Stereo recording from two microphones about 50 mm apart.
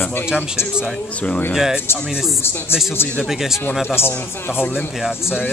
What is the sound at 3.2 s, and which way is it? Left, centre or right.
Speech, centre.